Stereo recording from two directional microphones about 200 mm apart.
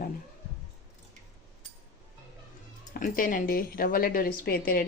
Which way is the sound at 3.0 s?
45° left (ahead or behind).